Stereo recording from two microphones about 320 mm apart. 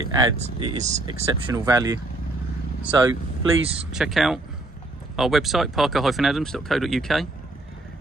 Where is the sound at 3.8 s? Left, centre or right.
Centre.